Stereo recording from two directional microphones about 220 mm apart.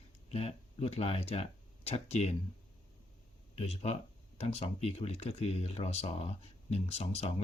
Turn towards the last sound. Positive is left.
turn(degrees=30)  # may be behind; listen again after turning